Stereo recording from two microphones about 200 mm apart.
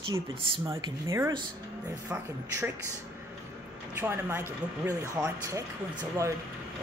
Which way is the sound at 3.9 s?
10° right (ahead or behind).